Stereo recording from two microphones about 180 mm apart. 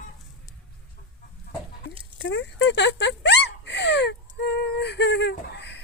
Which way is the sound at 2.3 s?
85° left.